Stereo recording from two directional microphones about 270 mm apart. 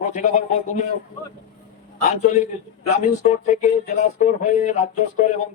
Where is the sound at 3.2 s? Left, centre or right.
Left.